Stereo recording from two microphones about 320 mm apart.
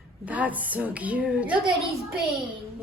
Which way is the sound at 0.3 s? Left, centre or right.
Centre.